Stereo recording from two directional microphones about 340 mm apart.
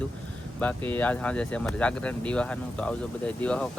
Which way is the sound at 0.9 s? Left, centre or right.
Centre.